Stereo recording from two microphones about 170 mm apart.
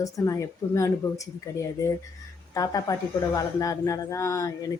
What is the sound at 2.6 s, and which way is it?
Speech, 20° left (ahead or behind).